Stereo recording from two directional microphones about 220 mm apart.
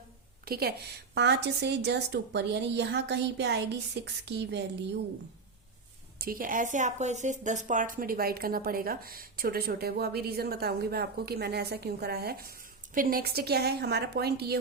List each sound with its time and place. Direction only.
0.4 s a woman's voice: 45° right (ahead or behind)
6.1 s a woman's voice: 40° right (ahead or behind)